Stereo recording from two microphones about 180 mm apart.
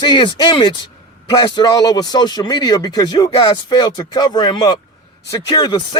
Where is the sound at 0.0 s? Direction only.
25° left (ahead or behind).